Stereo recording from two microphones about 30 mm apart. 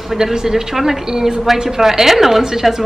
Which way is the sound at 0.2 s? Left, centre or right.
Right.